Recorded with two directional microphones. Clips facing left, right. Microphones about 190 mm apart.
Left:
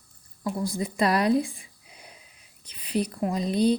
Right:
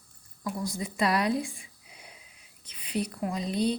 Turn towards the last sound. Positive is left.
turn(degrees=35)  # may be behind; listen again after turning